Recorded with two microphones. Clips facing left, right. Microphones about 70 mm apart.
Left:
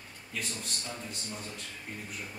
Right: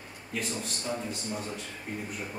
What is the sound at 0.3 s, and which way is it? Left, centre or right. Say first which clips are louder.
Speech: right 5 dB; centre.